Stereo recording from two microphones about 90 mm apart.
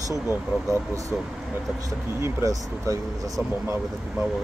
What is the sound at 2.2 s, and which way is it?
Speech, 35° right (ahead or behind).